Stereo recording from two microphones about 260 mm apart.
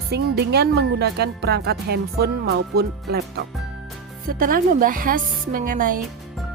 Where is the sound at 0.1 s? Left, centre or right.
Right.